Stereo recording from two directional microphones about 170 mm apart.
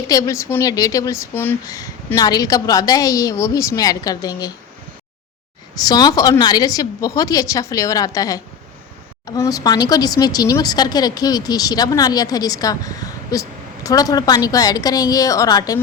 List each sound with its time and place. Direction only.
0.1 s speech: 20° left (ahead or behind)
5.8 s speech: 20° left (ahead or behind)